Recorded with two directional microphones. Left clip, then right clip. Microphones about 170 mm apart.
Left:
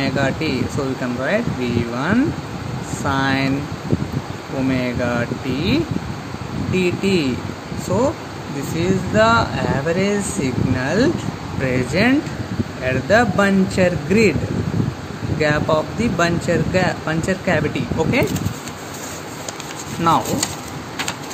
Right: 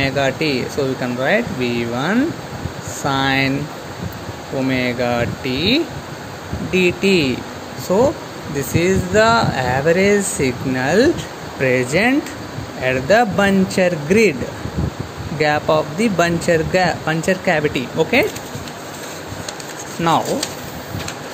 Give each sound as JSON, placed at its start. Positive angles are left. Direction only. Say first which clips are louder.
{"t": 0.0, "sound": "speech", "louder": "right 3 dB", "side_deg": -10}
{"t": 4.6, "sound": "speech", "louder": "right 2 dB", "side_deg": -10}
{"t": 15.3, "sound": "speech", "louder": "right 2 dB", "side_deg": -15}
{"t": 20.1, "sound": "speech", "louder": "even", "side_deg": -5}